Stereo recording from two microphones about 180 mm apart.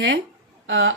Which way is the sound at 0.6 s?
80° right.